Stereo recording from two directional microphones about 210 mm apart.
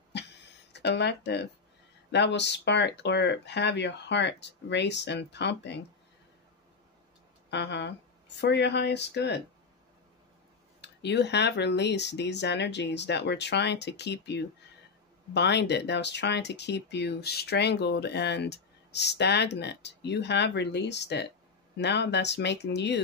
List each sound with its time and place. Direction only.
0.7 s speech: 55° left (ahead or behind)
7.5 s speech: 55° left (ahead or behind)
10.8 s speech: 55° left (ahead or behind)